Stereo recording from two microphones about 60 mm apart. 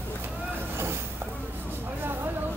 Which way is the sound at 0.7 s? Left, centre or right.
Right.